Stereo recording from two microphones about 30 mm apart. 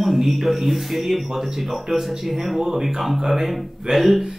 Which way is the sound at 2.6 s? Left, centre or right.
Centre.